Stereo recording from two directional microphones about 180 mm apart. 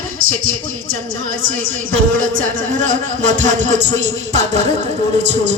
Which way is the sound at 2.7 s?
45° right (ahead or behind).